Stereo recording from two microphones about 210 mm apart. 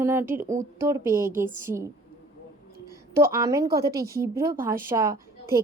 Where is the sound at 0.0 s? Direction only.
10° right (ahead or behind).